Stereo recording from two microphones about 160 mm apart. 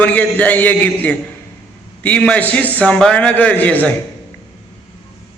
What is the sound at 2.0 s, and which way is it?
A man's voice, 5° left (ahead or behind).